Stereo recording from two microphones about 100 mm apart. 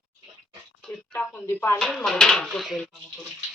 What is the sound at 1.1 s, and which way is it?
Speech, 15° left (ahead or behind).